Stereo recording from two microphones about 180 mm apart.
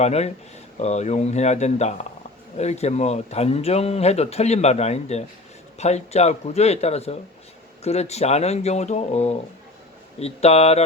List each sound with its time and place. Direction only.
0.0 s speech: 35° left (ahead or behind)